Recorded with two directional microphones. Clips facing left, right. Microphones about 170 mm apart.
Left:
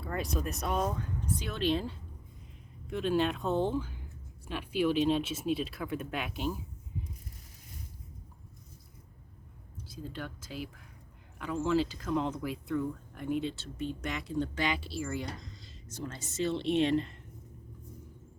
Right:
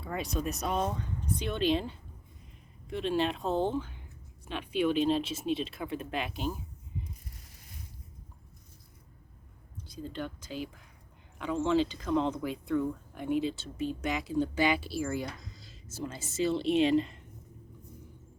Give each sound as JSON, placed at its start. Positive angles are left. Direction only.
{"t": 0.0, "sound": "speech", "side_deg": 0}
{"t": 2.8, "sound": "speech", "side_deg": 0}
{"t": 3.4, "sound": "speech", "side_deg": -35}
{"t": 3.7, "sound": "speech", "side_deg": 5}
{"t": 9.8, "sound": "speech", "side_deg": 5}